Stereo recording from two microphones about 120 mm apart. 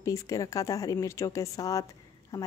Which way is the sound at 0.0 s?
25° left (ahead or behind).